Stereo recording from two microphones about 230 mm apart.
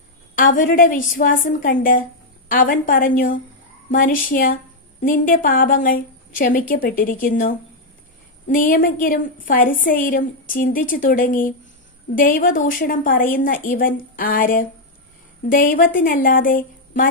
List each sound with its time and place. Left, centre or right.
0.3 s a woman's voice: left